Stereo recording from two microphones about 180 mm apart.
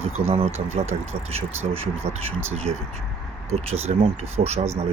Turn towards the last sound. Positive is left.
turn(degrees=-35)  # may be behind; listen again after turning